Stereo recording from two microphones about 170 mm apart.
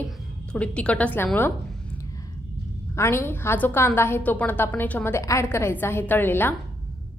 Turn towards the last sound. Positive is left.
turn(degrees=10)  # may be behind; listen again after turning